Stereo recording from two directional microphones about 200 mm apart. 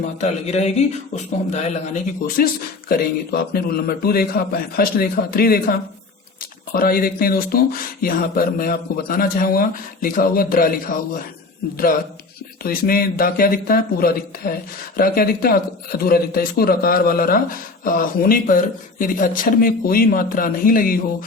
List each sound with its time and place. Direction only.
0.0 s a man's voice: 35° left (ahead or behind)
6.7 s a man's voice: 45° left (ahead or behind)
12.6 s a man's voice: 50° left (ahead or behind)